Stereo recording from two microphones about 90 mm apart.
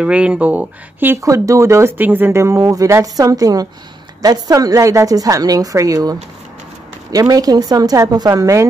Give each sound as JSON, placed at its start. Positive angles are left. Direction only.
{"t": 0.0, "sound": "speech", "side_deg": -10}
{"t": 1.2, "sound": "a woman's voice", "side_deg": -35}
{"t": 2.0, "sound": "a woman's voice", "side_deg": -20}